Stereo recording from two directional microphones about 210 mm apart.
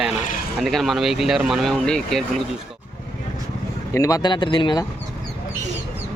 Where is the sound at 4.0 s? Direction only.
15° left (ahead or behind).